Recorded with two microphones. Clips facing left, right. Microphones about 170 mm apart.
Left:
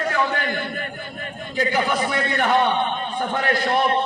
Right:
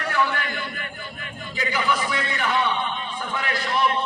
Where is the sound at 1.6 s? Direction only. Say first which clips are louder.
Left 3 dB; 50° left (ahead or behind).